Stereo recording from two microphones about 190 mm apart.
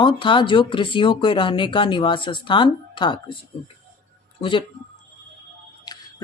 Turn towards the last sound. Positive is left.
turn(degrees=20)  # may be behind; listen again after turning